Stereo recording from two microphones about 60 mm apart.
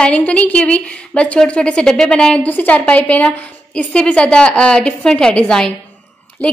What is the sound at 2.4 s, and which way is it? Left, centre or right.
A woman's voice, left.